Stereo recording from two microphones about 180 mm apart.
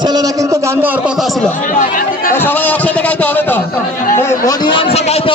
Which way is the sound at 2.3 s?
10° left (ahead or behind).